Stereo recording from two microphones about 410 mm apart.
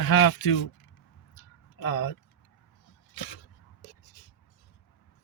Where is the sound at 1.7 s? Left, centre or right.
Left.